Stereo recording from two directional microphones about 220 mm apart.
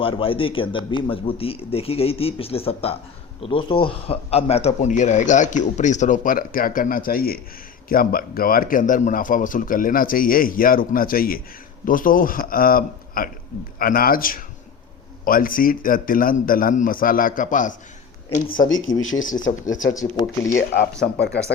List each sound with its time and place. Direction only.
0.0 s speech: 25° left (ahead or behind)
18.7 s speech: 60° left (ahead or behind)
19.2 s speech: 35° left (ahead or behind)
20.1 s speech: 15° left (ahead or behind)